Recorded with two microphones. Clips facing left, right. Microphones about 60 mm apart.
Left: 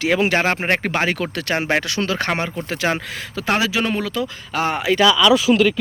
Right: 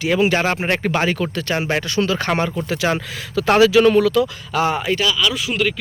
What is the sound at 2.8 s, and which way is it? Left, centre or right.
Speech, left.